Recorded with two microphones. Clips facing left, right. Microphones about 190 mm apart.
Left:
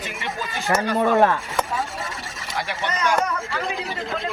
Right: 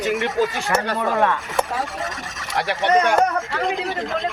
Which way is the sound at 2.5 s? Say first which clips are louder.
Right 9 dB; 65° right (ahead or behind).